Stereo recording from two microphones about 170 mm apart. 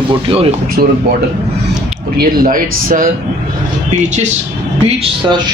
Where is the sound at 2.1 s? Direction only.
55° right (ahead or behind).